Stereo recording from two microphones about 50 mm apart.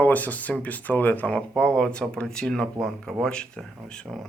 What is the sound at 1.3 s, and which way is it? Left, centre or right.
Speech, centre.